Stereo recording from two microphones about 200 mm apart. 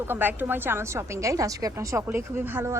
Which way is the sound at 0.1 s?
10° right (ahead or behind).